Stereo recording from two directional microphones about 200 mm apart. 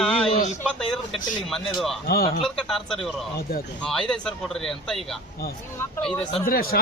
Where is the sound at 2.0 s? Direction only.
45° left (ahead or behind).